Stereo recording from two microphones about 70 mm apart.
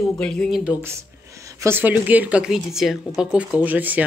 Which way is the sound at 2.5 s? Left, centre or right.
Centre.